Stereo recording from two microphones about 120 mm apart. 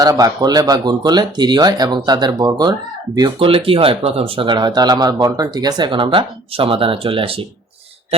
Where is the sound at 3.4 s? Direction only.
50° right (ahead or behind).